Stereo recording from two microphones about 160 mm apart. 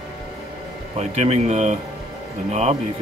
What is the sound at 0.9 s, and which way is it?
Speech, 40° right (ahead or behind).